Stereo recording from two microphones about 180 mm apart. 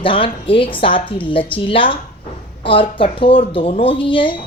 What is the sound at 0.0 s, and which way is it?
A woman's voice, 30° left (ahead or behind).